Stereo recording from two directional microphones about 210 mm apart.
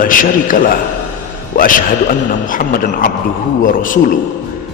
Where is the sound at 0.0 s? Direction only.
40° left (ahead or behind).